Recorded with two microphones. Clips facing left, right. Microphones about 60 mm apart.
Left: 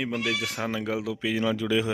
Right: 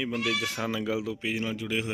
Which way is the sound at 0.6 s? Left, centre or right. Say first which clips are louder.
Left 1 dB; left.